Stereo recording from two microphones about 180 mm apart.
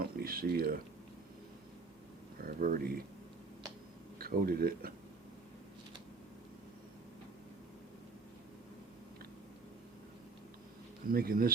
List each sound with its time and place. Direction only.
0.0 s speech: 55° right (ahead or behind)
2.4 s speech: 50° right (ahead or behind)
4.2 s speech: 55° right (ahead or behind)
11.1 s speech: 55° right (ahead or behind)